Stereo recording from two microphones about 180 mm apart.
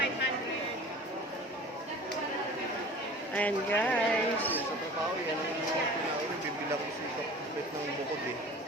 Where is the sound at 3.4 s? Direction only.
10° left (ahead or behind).